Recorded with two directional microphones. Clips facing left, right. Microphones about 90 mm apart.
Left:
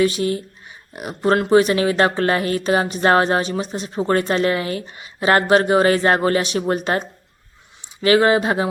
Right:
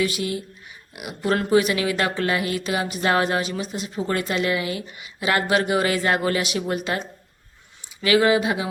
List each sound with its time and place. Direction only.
0.0 s speech: 40° left (ahead or behind)